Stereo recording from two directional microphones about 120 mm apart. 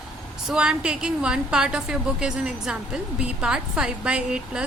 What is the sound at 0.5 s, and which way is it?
A woman's voice, 5° right (ahead or behind).